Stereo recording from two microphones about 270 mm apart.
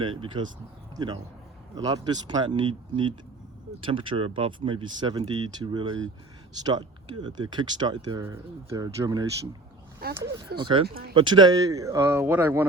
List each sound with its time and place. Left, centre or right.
0.0 s speech: centre
10.0 s speech: right
10.6 s speech: centre
10.8 s speech: right
11.1 s speech: centre